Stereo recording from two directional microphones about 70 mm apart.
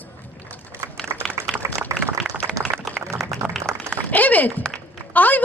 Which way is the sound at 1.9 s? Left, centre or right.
Right.